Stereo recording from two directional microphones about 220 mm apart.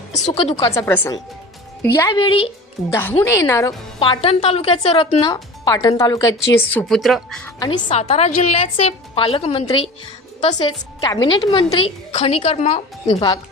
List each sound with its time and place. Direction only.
0.3 s a woman's voice: 30° left (ahead or behind)
0.5 s a woman's voice: 15° left (ahead or behind)
3.0 s a woman's voice: 10° left (ahead or behind)
7.9 s a woman's voice: 25° left (ahead or behind)
11.0 s a woman's voice: 20° left (ahead or behind)